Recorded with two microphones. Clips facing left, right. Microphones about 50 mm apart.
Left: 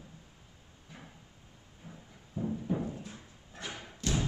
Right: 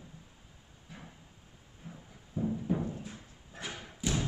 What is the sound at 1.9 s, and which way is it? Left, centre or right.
Music, centre.